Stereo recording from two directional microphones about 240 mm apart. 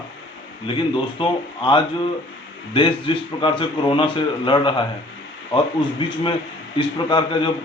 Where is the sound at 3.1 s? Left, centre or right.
Left.